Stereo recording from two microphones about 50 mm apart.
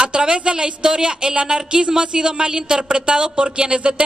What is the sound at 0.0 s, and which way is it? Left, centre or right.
A woman's voice, centre.